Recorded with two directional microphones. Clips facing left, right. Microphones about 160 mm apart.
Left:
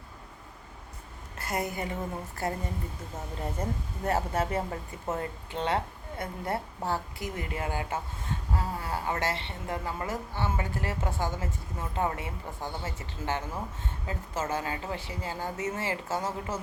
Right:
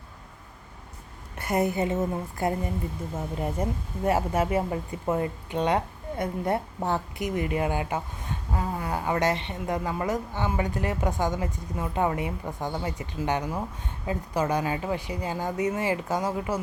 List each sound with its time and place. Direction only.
1.4 s a woman's voice: 25° right (ahead or behind)
5.0 s speech: 30° right (ahead or behind)
5.5 s a woman's voice: 15° right (ahead or behind)